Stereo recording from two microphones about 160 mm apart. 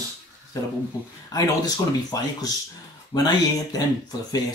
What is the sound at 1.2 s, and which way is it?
Speech, 25° left (ahead or behind).